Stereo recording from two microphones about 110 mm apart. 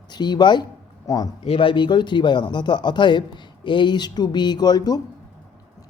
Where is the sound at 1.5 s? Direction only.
50° left (ahead or behind).